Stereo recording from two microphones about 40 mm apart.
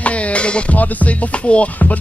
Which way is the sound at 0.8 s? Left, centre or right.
Left.